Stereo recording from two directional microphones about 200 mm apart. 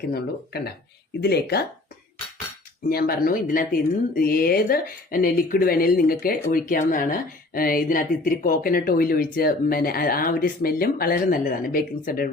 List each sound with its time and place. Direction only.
0.1 s speech: 50° left (ahead or behind)
2.9 s speech: 45° left (ahead or behind)